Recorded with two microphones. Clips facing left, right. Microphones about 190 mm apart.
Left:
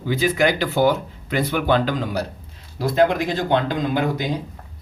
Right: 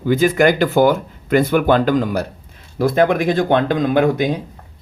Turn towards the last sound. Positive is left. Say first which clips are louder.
# right 6 dB
turn(degrees=-60)  # may be behind; listen again after turning